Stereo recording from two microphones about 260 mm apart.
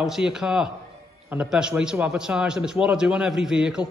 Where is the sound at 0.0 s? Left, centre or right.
Centre.